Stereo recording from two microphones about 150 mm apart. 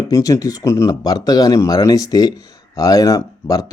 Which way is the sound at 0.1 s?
25° left (ahead or behind).